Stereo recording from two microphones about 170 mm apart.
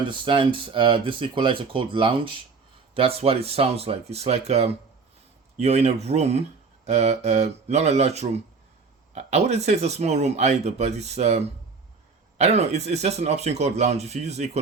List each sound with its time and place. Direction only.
0.1 s speech: 30° right (ahead or behind)